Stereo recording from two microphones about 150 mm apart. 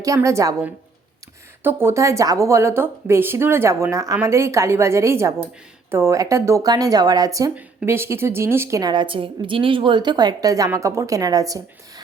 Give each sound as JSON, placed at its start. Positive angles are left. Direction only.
{"t": 0.0, "sound": "a woman's voice", "side_deg": -20}
{"t": 7.5, "sound": "a woman's voice", "side_deg": -15}